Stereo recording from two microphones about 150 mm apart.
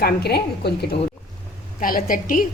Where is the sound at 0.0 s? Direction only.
90° left.